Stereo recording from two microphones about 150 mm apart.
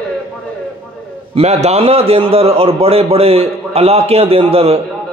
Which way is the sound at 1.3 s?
45° right (ahead or behind).